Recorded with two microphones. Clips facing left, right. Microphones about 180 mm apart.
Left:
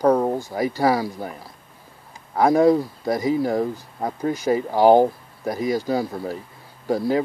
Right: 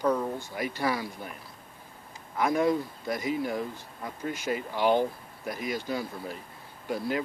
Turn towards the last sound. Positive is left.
turn(degrees=40)  # may be behind; listen again after turning